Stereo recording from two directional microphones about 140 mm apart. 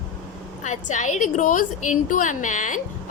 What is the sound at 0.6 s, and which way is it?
A woman's voice, 60° left (ahead or behind).